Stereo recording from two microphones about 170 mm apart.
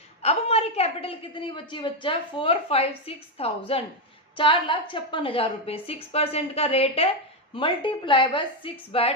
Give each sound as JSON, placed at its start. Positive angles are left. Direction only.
{"t": 0.2, "sound": "a woman's voice", "side_deg": 40}